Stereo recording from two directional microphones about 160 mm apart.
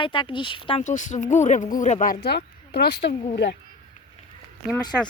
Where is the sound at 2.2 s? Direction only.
90° left.